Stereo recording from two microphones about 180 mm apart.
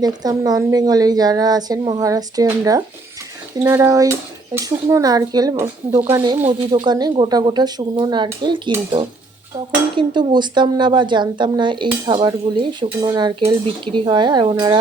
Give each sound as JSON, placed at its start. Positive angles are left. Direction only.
{"t": 0.0, "sound": "a woman's voice", "side_deg": -20}
{"t": 6.8, "sound": "a woman's voice", "side_deg": -25}
{"t": 9.9, "sound": "a woman's voice", "side_deg": -25}